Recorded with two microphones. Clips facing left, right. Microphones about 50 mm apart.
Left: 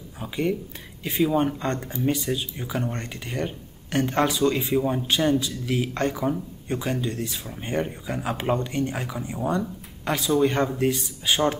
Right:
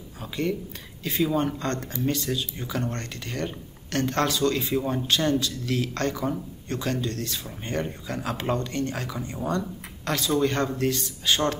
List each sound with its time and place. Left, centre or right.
0.2 s speech: centre